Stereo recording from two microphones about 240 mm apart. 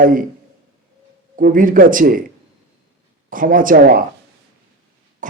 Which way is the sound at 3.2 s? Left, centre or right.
Right.